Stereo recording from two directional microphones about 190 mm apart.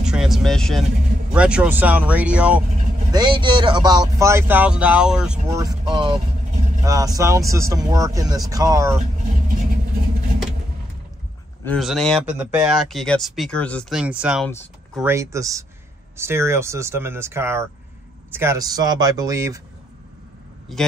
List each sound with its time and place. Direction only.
0.0 s vehicle: 5° right (ahead or behind)
1.3 s speech: 5° right (ahead or behind)
3.1 s speech: 25° right (ahead or behind); by 5.4 s 5° right (ahead or behind)
5.5 s speech: 20° right (ahead or behind)
8.9 s vehicle: 40° right (ahead or behind)
11.6 s speech: centre (ahead or behind); by 19.6 s 15° right (ahead or behind)
20.7 s speech: centre (ahead or behind)